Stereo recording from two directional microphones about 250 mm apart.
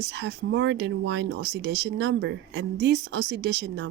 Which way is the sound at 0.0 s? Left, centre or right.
Right.